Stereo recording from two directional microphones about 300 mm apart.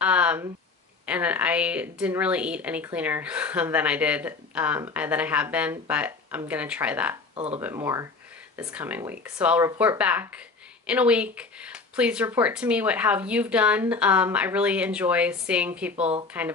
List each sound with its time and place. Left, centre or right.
0.0 s a sound: centre
1.0 s a woman's voice: centre
7.3 s speech: centre
7.6 s a woman's voice: centre